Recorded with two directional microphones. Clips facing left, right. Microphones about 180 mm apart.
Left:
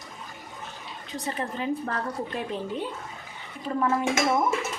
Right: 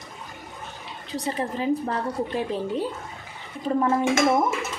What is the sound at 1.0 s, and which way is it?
A woman's voice, 35° right (ahead or behind).